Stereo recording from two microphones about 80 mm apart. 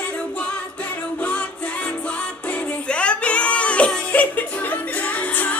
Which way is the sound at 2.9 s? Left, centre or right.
Centre.